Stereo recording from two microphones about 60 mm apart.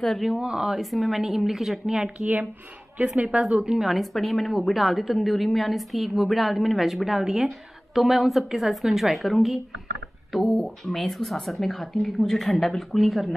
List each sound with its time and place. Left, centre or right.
0.4 s speech: centre
0.7 s a woman's voice: centre
2.1 s a woman's voice: right; by 13.3 s centre